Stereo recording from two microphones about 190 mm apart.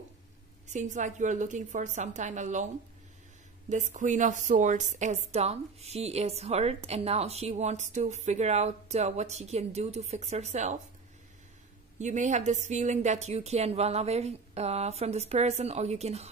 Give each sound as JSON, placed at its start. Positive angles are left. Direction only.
{"t": 0.7, "sound": "a woman's voice", "side_deg": -40}
{"t": 12.0, "sound": "a woman's voice", "side_deg": -40}